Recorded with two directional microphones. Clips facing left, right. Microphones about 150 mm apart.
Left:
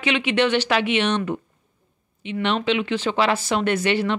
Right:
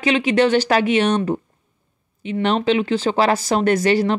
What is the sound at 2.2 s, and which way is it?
Speech, 40° right (ahead or behind).